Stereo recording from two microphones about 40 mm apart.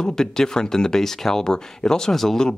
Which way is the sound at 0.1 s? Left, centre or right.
Centre.